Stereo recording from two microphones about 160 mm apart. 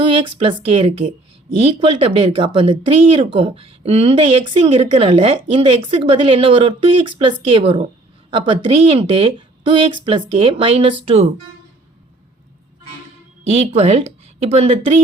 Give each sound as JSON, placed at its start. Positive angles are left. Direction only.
{"t": 0.0, "sound": "a woman's voice", "side_deg": -35}
{"t": 13.5, "sound": "speech", "side_deg": -40}